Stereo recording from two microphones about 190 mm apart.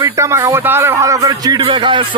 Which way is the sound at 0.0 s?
15° right (ahead or behind).